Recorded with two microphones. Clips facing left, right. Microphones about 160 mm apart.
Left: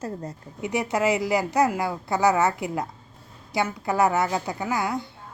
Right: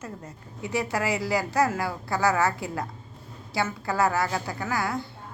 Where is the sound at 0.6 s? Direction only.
20° left (ahead or behind).